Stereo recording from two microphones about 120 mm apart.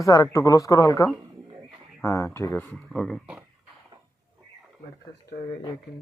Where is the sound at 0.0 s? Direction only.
30° left (ahead or behind); by 3.2 s 5° left (ahead or behind).